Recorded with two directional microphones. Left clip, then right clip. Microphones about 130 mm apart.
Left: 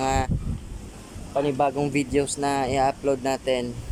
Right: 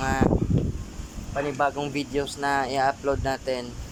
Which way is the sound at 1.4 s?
30° left (ahead or behind).